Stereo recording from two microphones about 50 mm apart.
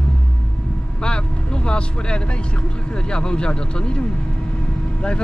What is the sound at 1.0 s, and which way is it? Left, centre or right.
Vehicle, centre.